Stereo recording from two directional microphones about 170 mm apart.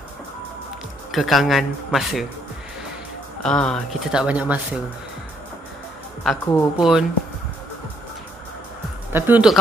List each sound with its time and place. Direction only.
1.1 s speech: centre (ahead or behind)
3.4 s speech: 5° left (ahead or behind)
6.4 s a woman's voice: 15° left (ahead or behind)
6.8 s speech: 5° right (ahead or behind)
9.1 s speech: 10° right (ahead or behind)